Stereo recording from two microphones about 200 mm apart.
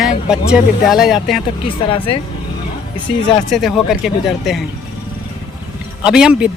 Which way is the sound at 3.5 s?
Centre (ahead or behind).